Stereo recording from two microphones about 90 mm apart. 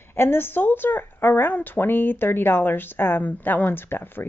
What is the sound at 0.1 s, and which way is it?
Speech, 25° left (ahead or behind).